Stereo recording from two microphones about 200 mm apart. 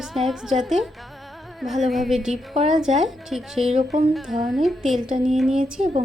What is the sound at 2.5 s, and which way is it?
Speech, 35° right (ahead or behind).